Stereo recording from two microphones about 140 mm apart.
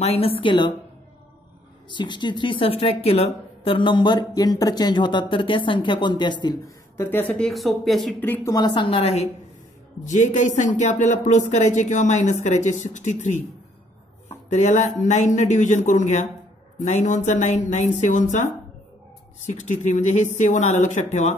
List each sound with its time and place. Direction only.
0.0 s a woman's voice: 45° left (ahead or behind)
1.9 s a woman's voice: 35° left (ahead or behind)
7.0 s speech: 15° left (ahead or behind)
7.4 s speech: centre (ahead or behind)
8.2 s speech: 15° left (ahead or behind)
8.5 s a woman's voice: 30° left (ahead or behind); by 9.3 s 50° left (ahead or behind)
10.0 s speech: 60° left (ahead or behind)
14.5 s speech: 55° left (ahead or behind)